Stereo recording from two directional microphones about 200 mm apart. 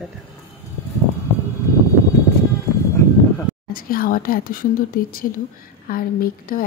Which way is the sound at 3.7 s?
45° left (ahead or behind).